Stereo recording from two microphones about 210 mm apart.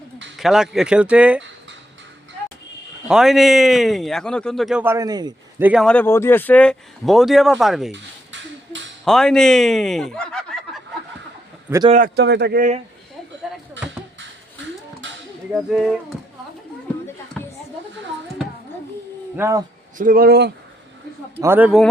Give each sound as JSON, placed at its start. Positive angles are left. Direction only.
{"t": 0.3, "sound": "a man's voice", "side_deg": 0}
{"t": 3.1, "sound": "a man's voice", "side_deg": 0}
{"t": 5.6, "sound": "a man's voice", "side_deg": 0}
{"t": 7.9, "sound": "a sound", "side_deg": -60}
{"t": 9.0, "sound": "a man's voice", "side_deg": 0}
{"t": 11.9, "sound": "speech", "side_deg": -40}
{"t": 15.0, "sound": "a sound", "side_deg": -60}
{"t": 15.7, "sound": "a man's voice", "side_deg": 0}
{"t": 19.4, "sound": "speech", "side_deg": -15}
{"t": 20.0, "sound": "speech", "side_deg": -40}
{"t": 21.4, "sound": "speech", "side_deg": -10}